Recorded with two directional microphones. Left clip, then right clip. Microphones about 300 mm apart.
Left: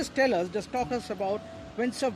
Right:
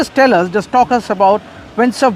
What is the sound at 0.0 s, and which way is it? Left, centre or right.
Speech, right.